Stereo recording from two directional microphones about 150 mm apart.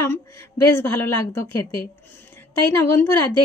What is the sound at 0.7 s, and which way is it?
Speech, 15° left (ahead or behind).